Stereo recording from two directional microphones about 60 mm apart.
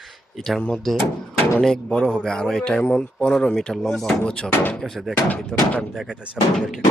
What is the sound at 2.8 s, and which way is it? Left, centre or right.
Speech, left.